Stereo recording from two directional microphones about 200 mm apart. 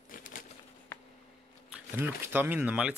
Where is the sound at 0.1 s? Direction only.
45° left (ahead or behind).